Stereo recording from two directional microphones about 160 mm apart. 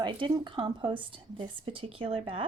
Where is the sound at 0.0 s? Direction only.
30° right (ahead or behind).